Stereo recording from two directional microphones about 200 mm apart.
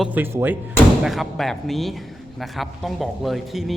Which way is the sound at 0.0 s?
10° right (ahead or behind).